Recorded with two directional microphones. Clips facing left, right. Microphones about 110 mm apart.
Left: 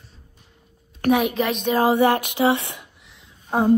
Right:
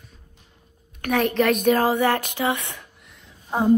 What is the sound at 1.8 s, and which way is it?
Speech, 15° left (ahead or behind).